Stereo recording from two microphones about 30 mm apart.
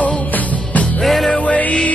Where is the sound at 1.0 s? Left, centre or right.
Centre.